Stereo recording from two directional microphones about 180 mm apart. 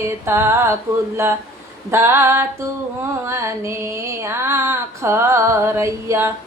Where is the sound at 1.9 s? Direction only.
15° right (ahead or behind).